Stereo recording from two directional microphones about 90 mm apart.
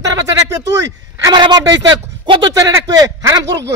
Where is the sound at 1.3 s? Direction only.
55° right (ahead or behind).